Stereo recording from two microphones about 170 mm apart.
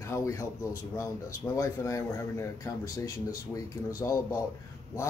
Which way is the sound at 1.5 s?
20° left (ahead or behind).